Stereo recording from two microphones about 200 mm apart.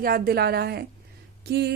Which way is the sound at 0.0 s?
50° right (ahead or behind).